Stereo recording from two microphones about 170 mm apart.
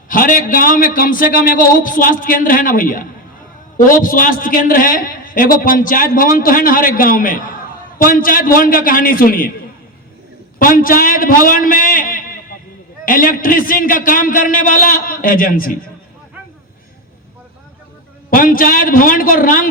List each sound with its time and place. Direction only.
0.1 s a man's voice: 55° left (ahead or behind)
10.6 s a man's voice: 55° left (ahead or behind)
18.3 s a man's voice: 55° left (ahead or behind)